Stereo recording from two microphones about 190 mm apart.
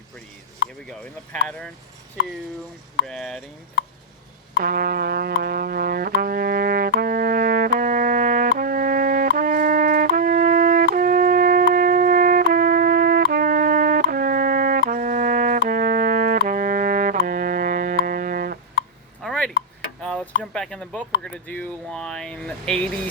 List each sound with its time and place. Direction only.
0.9 s speech: 5° left (ahead or behind)
3.1 s speech: 5° left (ahead or behind)
4.6 s brass instrument: 50° right (ahead or behind)
17.2 s music: 45° right (ahead or behind)
19.2 s a sound: 5° left (ahead or behind)
20.4 s speech: 5° left (ahead or behind)